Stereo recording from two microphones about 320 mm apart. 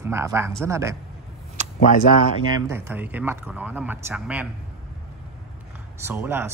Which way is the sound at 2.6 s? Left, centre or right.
Centre.